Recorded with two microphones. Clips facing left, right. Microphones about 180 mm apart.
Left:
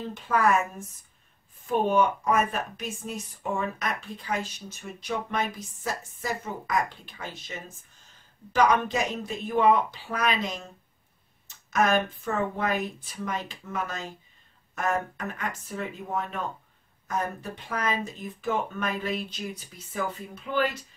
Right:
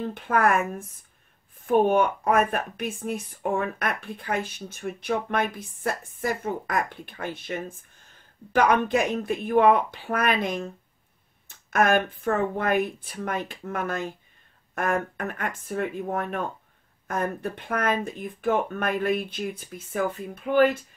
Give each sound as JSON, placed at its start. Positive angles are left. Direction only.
{"t": 0.0, "sound": "speech", "side_deg": -55}